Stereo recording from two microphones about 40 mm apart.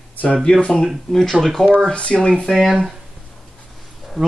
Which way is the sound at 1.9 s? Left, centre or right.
Left.